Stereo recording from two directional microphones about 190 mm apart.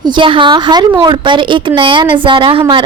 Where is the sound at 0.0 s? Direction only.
25° right (ahead or behind).